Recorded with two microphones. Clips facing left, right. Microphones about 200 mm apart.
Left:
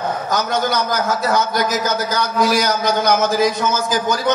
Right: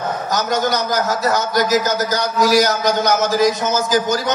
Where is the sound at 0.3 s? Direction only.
55° left (ahead or behind).